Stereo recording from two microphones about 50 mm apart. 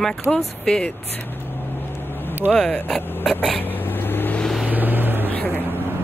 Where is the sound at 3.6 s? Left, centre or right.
Left.